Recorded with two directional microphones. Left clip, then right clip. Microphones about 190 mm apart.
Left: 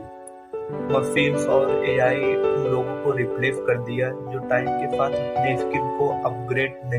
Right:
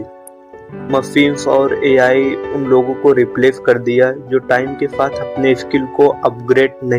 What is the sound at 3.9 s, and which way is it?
Music, 50° right (ahead or behind).